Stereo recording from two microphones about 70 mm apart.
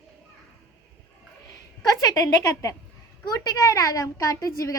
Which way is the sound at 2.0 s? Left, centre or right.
Left.